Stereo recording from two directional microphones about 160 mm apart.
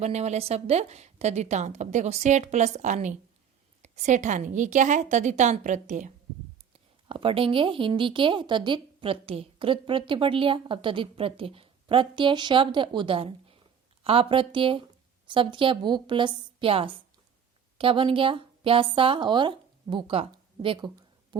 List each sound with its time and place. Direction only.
0.0 s a woman's voice: 45° right (ahead or behind)
7.1 s a woman's voice: 35° right (ahead or behind)